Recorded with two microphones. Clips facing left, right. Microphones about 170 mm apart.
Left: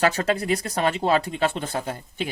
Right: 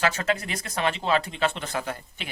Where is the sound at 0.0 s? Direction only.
35° left (ahead or behind).